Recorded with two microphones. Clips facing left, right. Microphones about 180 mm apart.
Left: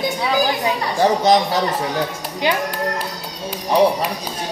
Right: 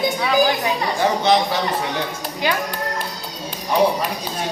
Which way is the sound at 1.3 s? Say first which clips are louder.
Left 2 dB; 40° left (ahead or behind).